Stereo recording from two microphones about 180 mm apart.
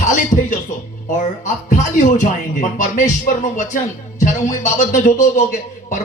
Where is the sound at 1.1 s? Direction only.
45° left (ahead or behind).